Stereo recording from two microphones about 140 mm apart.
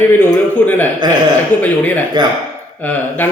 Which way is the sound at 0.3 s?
10° left (ahead or behind).